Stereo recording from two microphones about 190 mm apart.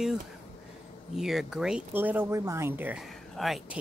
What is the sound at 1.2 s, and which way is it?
Speech, centre (ahead or behind).